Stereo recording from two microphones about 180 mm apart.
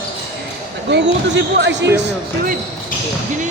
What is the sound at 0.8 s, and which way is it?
Speech, 75° right (ahead or behind).